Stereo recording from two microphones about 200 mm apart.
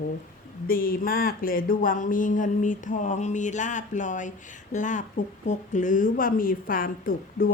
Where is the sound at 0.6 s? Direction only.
45° left (ahead or behind).